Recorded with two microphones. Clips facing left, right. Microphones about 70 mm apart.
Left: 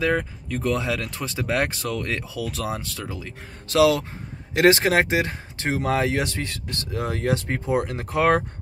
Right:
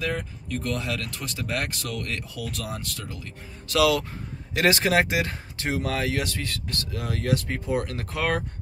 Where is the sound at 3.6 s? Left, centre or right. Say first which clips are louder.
Left 3 dB; left.